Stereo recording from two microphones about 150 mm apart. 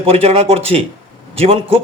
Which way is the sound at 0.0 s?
40° right (ahead or behind).